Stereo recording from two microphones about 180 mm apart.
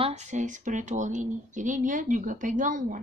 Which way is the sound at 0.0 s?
40° right (ahead or behind).